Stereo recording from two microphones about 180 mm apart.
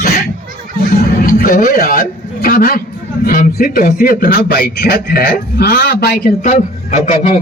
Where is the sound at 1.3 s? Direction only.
50° left (ahead or behind).